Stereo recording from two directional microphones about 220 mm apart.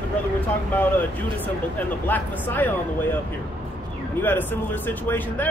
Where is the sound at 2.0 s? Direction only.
10° left (ahead or behind).